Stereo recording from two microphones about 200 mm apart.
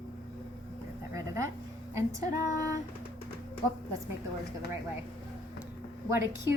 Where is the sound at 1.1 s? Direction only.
15° right (ahead or behind).